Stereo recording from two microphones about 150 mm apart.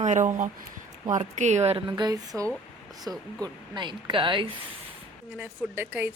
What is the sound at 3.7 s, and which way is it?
Speech, 30° right (ahead or behind).